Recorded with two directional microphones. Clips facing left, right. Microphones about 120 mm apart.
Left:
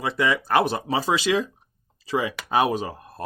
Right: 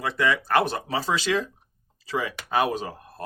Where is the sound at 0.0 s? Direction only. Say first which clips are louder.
Left 1 dB; 15° left (ahead or behind).